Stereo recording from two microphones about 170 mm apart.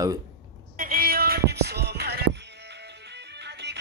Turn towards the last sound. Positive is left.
turn(degrees=-85)